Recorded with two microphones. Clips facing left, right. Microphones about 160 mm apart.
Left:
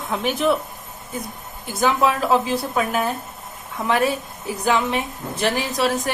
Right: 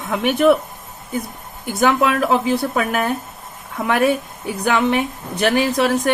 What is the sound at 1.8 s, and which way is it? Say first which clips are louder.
A woman's voice: right 3 dB; 65° right (ahead or behind).